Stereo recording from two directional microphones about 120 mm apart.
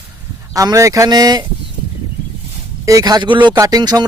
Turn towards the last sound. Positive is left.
turn(degrees=-35)  # may be behind; listen again after turning